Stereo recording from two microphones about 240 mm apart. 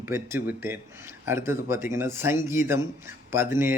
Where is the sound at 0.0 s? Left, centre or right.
Centre.